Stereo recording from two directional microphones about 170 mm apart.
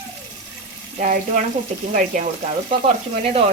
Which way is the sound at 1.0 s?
50° right (ahead or behind).